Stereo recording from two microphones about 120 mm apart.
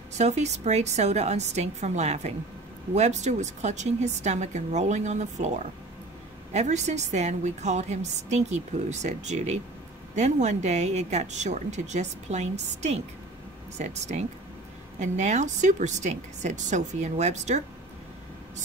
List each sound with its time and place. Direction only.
0.2 s a woman's voice: 70° right (ahead or behind)